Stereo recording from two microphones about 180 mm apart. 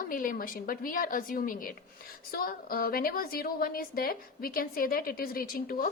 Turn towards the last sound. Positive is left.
turn(degrees=55)  # may be behind; listen again after turning